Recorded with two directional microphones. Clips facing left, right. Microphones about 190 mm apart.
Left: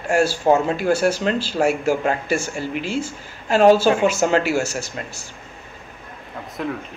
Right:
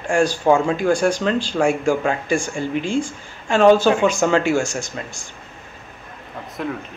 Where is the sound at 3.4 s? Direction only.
40° left (ahead or behind).